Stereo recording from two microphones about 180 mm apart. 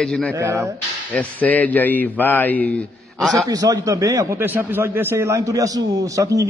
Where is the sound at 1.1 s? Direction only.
10° left (ahead or behind).